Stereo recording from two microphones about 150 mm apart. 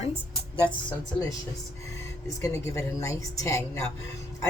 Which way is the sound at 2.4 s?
20° left (ahead or behind).